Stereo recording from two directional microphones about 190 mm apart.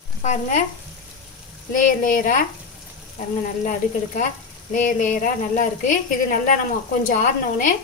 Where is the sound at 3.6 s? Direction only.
40° left (ahead or behind).